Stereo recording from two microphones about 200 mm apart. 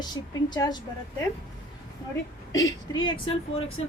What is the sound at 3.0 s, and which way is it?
Speech, 25° left (ahead or behind).